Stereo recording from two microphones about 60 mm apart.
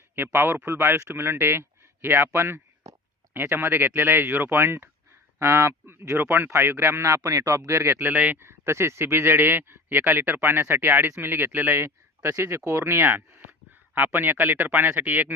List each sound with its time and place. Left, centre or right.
0.6 s speech: right
5.4 s a man's voice: right
5.8 s speech: right
7.0 s a man's voice: right
7.8 s speech: right
8.4 s speech: right